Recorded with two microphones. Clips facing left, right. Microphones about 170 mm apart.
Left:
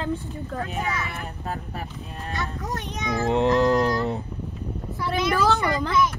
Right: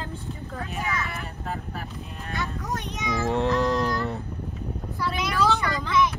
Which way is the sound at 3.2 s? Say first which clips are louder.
Left 4 dB; 20° left (ahead or behind).